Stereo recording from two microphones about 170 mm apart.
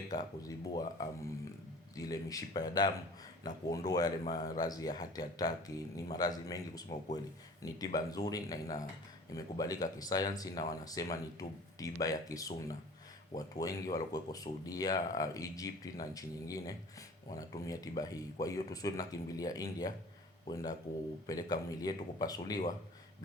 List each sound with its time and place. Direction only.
0.1 s speech: 20° left (ahead or behind)